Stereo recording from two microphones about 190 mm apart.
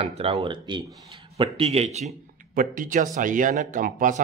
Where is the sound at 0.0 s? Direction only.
35° right (ahead or behind).